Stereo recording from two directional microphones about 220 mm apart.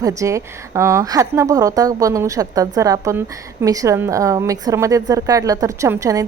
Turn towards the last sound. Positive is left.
turn(degrees=-15)  # may be behind; listen again after turning